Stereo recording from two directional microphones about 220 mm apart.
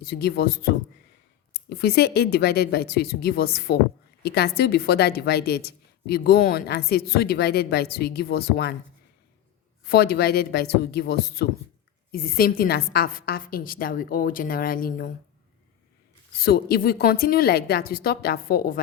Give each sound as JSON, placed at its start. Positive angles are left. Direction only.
{"t": 0.0, "sound": "a woman's voice", "side_deg": 45}
{"t": 9.9, "sound": "a woman's voice", "side_deg": 45}
{"t": 16.4, "sound": "a woman's voice", "side_deg": 45}